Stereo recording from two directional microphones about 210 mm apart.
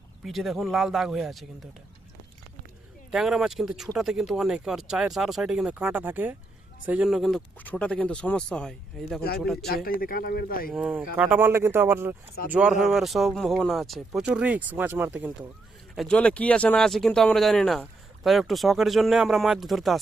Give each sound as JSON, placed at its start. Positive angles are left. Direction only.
{"t": 0.3, "sound": "speech", "side_deg": 0}
{"t": 3.1, "sound": "speech", "side_deg": 0}
{"t": 9.6, "sound": "speech", "side_deg": 45}
{"t": 10.7, "sound": "speech", "side_deg": -5}
{"t": 16.0, "sound": "speech", "side_deg": 5}